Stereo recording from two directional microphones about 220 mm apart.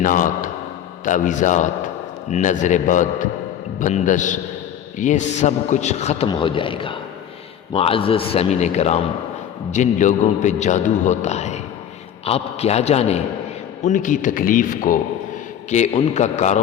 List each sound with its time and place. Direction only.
0.0 s a man's voice: 35° left (ahead or behind)